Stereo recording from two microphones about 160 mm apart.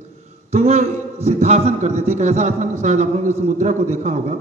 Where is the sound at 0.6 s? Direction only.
40° right (ahead or behind).